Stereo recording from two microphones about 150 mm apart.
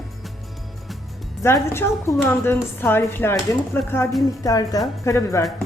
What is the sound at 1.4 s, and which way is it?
Speech, 20° left (ahead or behind).